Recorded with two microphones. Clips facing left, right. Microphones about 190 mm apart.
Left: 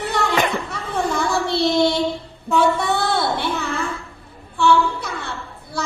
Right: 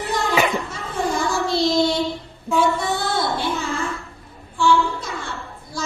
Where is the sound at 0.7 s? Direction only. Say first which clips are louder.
Left 1 dB; 60° left (ahead or behind).